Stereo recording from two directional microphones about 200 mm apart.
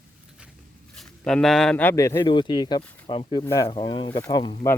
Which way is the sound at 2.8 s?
10° left (ahead or behind).